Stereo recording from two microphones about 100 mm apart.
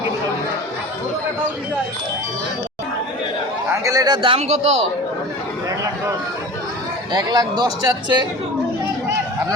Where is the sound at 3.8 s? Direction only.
40° right (ahead or behind).